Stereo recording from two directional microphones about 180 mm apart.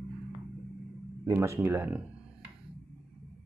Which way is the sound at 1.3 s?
15° right (ahead or behind).